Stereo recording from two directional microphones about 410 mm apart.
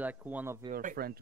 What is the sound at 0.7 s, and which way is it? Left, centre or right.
Speech, centre.